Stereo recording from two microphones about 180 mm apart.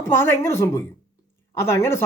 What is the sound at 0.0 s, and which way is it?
Speech, 15° left (ahead or behind).